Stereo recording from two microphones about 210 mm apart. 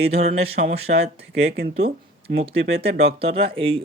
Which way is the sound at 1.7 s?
30° right (ahead or behind).